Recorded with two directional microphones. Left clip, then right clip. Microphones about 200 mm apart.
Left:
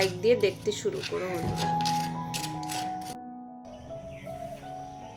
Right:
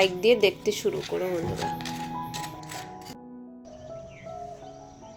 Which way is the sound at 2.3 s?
25° right (ahead or behind).